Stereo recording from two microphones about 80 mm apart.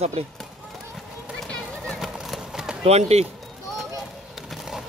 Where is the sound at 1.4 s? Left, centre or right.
Centre.